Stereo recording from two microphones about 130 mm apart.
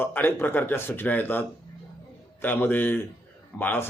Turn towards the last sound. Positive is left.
turn(degrees=15)  # may be behind; listen again after turning